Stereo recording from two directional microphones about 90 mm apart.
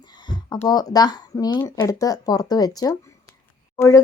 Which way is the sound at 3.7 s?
30° left (ahead or behind).